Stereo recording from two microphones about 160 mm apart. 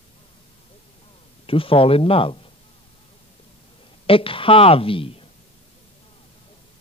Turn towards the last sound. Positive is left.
turn(degrees=35)  # may be behind; listen again after turning